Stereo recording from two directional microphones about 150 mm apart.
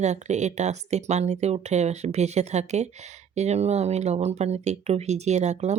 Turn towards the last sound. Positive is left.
turn(degrees=-50)  # may be behind; listen again after turning